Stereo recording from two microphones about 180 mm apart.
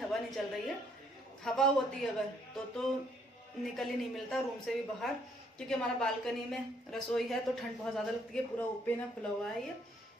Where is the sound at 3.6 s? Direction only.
Centre (ahead or behind).